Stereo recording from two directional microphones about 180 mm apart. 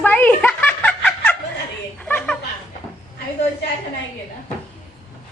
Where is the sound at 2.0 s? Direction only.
10° left (ahead or behind).